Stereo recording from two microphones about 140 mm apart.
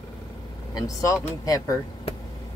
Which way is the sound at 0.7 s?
25° left (ahead or behind).